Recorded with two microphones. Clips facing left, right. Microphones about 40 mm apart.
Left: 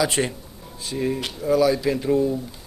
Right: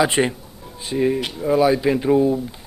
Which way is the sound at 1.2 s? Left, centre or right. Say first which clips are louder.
Right 2 dB; centre.